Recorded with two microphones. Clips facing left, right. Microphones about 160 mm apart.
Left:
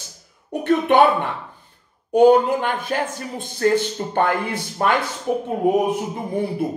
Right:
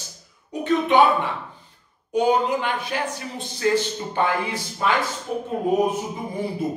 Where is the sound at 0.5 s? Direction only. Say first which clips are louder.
Left 3 dB; 60° left (ahead or behind).